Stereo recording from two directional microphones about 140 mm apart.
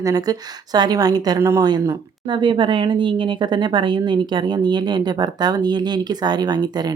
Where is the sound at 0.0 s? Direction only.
25° right (ahead or behind).